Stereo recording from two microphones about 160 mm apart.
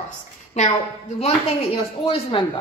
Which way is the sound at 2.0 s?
35° left (ahead or behind).